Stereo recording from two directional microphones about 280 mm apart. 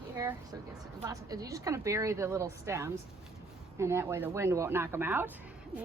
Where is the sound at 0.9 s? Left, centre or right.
Centre.